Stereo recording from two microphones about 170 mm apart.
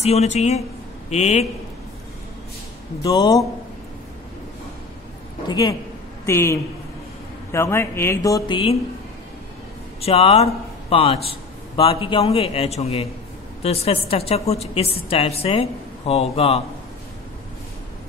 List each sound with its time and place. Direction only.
0.0 s a woman's voice: 40° left (ahead or behind)
3.0 s speech: 20° left (ahead or behind)
5.5 s speech: 25° left (ahead or behind)
10.0 s a woman's voice: 35° left (ahead or behind)